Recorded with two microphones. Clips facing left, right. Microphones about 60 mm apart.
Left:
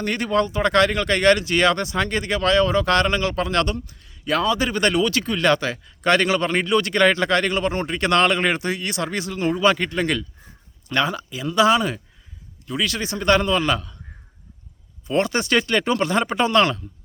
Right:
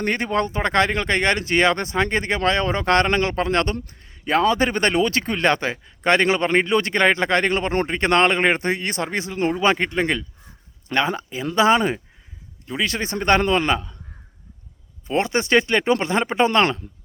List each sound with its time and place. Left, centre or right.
0.0 s speech: right
15.0 s speech: right